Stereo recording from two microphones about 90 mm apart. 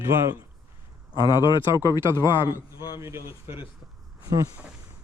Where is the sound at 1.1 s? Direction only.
60° left (ahead or behind).